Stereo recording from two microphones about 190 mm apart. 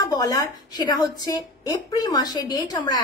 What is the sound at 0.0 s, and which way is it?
A woman's voice, 20° left (ahead or behind).